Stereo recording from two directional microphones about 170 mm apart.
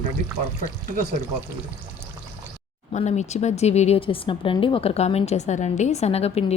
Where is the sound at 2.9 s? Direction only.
45° left (ahead or behind).